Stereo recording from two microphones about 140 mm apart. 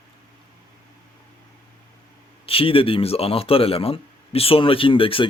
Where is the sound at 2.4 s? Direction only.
40° left (ahead or behind).